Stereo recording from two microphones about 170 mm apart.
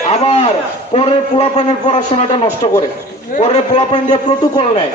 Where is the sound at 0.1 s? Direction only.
35° left (ahead or behind).